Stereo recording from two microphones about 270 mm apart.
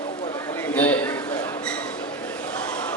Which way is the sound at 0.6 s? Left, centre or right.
Centre.